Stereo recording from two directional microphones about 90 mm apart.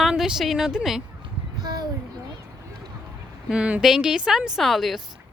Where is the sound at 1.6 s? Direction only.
50° right (ahead or behind).